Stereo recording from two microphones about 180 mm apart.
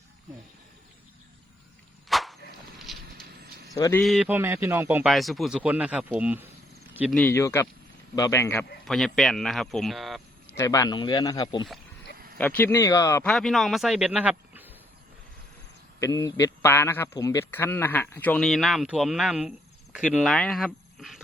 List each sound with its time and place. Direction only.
2.0 s a sound: centre (ahead or behind)
2.9 s horse: centre (ahead or behind)
3.7 s speech: 20° left (ahead or behind)
4.0 s a man's voice: centre (ahead or behind)
4.3 s speech: 10° right (ahead or behind)
5.1 s a man's voice: centre (ahead or behind)
7.1 s speech: 10° left (ahead or behind)
8.9 s a man's voice: centre (ahead or behind)
10.6 s speech: 20° left (ahead or behind)
12.1 s a sound: 55° right (ahead or behind)
12.4 s speech: 10° left (ahead or behind)
13.3 s a man's voice: centre (ahead or behind)
16.0 s a man's voice: 20° left (ahead or behind); by 21.2 s centre (ahead or behind)